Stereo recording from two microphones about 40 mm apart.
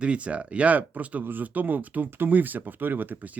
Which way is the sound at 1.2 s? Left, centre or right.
Right.